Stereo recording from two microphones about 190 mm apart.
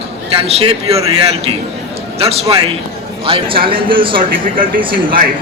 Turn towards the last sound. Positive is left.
turn(degrees=-25)  # may be behind; listen again after turning